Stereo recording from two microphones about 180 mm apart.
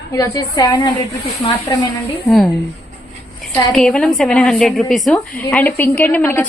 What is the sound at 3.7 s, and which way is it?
A woman's voice, 5° left (ahead or behind).